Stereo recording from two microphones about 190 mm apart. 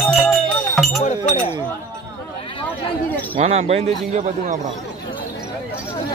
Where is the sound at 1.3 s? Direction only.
40° left (ahead or behind).